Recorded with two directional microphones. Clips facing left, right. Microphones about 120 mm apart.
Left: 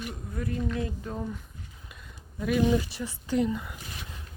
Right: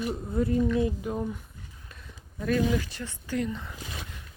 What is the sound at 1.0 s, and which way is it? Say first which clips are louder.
Speech: right 4 dB; 10° right (ahead or behind).